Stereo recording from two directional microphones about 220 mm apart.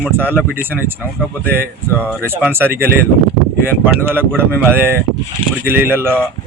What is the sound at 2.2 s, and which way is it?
Speech, 10° right (ahead or behind).